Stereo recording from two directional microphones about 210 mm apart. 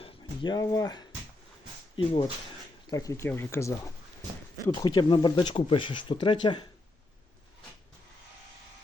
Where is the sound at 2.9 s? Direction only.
15° left (ahead or behind).